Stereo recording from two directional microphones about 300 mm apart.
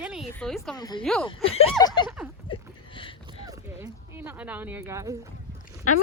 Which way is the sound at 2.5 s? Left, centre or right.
Centre.